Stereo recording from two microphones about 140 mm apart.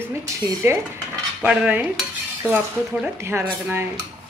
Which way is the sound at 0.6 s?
15° right (ahead or behind).